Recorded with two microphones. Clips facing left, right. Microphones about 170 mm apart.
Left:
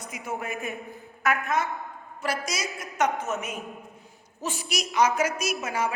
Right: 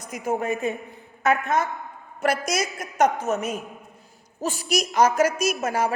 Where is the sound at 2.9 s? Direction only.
40° right (ahead or behind).